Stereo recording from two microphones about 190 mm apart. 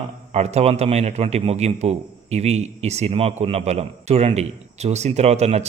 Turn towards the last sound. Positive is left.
turn(degrees=-35)  # may be behind; listen again after turning